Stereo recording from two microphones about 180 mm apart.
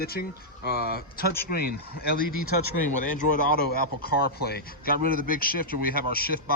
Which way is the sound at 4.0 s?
60° left (ahead or behind).